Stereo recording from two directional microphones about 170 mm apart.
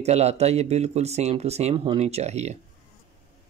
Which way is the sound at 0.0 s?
40° right (ahead or behind).